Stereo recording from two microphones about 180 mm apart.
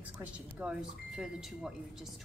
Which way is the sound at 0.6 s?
5° right (ahead or behind).